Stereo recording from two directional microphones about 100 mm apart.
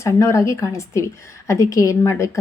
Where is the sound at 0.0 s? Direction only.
30° left (ahead or behind).